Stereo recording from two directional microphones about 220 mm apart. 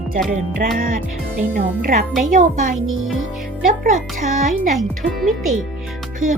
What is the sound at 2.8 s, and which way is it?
Speech, 65° right (ahead or behind).